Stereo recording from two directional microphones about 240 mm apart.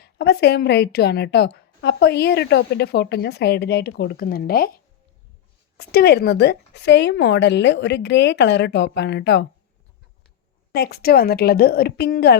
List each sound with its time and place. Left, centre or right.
0.0 s a woman's voice: left
5.8 s a woman's voice: left
10.8 s a woman's voice: left